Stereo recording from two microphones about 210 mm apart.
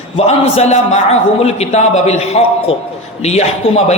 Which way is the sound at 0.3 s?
30° left (ahead or behind).